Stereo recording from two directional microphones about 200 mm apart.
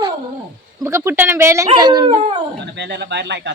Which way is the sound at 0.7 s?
15° right (ahead or behind).